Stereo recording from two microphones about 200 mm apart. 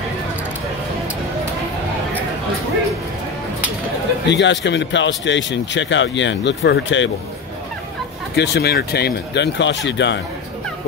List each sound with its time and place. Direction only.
4.3 s speech: 60° left (ahead or behind)
8.4 s speech: 55° left (ahead or behind)